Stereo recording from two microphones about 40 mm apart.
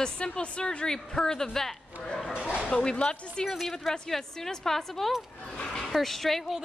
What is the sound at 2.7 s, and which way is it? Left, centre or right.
Speech, left.